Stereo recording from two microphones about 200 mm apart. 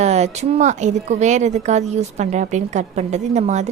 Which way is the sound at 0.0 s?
35° right (ahead or behind).